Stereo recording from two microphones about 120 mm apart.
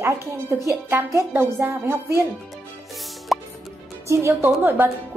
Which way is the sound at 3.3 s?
Centre (ahead or behind).